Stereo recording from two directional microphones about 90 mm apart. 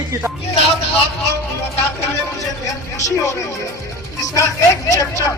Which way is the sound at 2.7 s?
35° left (ahead or behind).